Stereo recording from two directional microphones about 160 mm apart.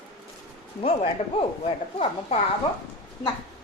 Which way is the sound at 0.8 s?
35° left (ahead or behind).